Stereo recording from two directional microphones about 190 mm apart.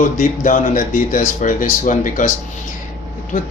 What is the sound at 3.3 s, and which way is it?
Speech, 45° left (ahead or behind).